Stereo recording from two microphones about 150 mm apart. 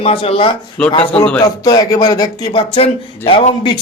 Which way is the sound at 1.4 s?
25° left (ahead or behind).